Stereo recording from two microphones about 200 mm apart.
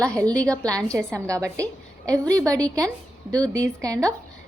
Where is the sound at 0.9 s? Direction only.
15° right (ahead or behind).